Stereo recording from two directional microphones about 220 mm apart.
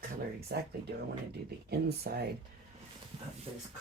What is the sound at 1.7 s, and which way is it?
Speech, 45° right (ahead or behind).